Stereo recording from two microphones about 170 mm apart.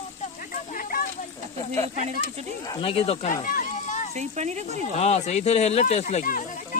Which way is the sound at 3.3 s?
55° left (ahead or behind).